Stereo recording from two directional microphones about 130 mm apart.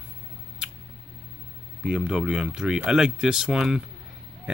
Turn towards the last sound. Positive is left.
turn(degrees=-5)  # may be behind; listen again after turning